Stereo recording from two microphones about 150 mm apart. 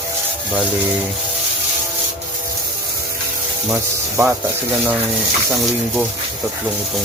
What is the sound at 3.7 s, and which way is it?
Speech, 15° right (ahead or behind).